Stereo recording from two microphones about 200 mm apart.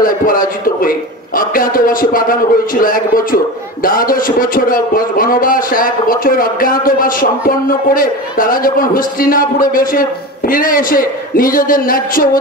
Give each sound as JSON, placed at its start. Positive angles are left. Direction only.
{"t": 0.0, "sound": "a man's voice", "side_deg": 45}